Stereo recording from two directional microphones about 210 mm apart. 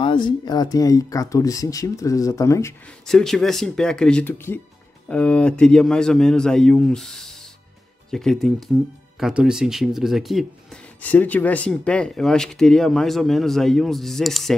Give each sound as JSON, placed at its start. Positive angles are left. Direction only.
{"t": 0.0, "sound": "speech", "side_deg": 20}
{"t": 3.1, "sound": "speech", "side_deg": 0}